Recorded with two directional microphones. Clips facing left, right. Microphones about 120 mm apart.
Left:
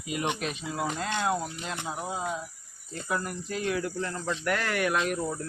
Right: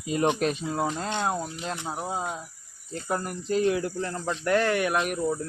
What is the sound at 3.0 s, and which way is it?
Speech, 30° right (ahead or behind).